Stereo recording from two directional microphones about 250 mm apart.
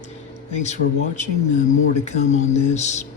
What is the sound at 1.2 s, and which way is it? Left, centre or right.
Speech, left.